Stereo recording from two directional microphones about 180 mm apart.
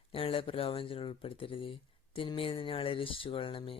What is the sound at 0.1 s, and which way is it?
Speech, 30° left (ahead or behind).